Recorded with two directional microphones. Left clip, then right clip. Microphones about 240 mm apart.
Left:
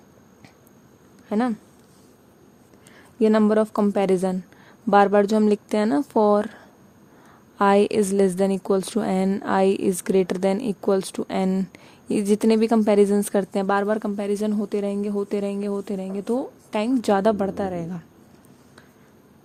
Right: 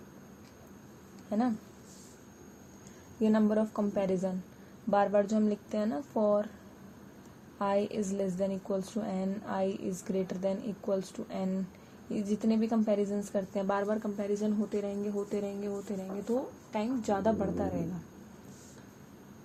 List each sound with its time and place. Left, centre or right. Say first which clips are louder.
1.3 s speech: left 8 dB; left
3.2 s a woman's voice: left 11 dB; left
7.6 s a woman's voice: left 13 dB; left